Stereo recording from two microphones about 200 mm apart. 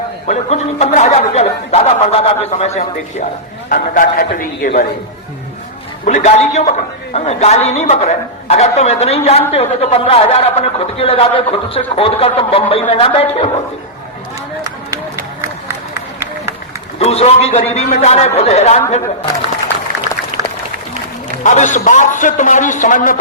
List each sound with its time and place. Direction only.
0.3 s a woman's voice: 35° left (ahead or behind)
3.7 s a man's voice: 45° left (ahead or behind)
6.1 s a woman's voice: 35° left (ahead or behind)
17.0 s a woman's voice: 30° left (ahead or behind)
21.4 s a woman's voice: 40° left (ahead or behind)